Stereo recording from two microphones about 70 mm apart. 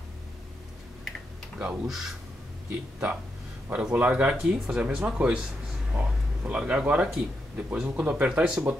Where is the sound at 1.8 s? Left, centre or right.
Centre.